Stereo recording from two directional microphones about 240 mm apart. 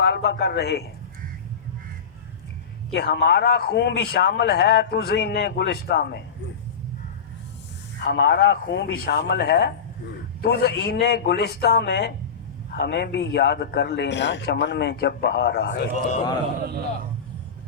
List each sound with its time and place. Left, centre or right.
0.0 s a man's voice: left
2.9 s a man's voice: left
8.0 s a man's voice: left